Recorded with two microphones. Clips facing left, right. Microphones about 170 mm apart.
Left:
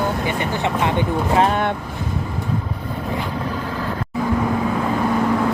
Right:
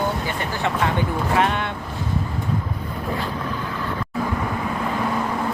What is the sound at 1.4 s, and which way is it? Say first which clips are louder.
Speech: left 4 dB; 40° left (ahead or behind).